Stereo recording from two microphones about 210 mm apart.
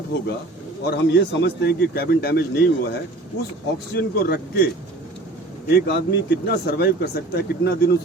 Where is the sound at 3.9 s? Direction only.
50° left (ahead or behind).